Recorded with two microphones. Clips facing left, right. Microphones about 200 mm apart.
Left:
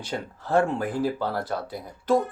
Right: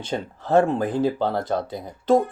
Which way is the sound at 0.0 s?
25° right (ahead or behind).